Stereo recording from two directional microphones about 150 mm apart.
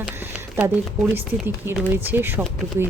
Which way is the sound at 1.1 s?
15° right (ahead or behind).